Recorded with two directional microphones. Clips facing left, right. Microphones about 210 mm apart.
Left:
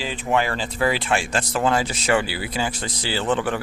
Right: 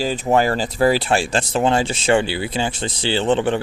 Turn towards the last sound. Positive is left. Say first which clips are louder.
# right 5 dB
turn(degrees=-25)  # may be behind; listen again after turning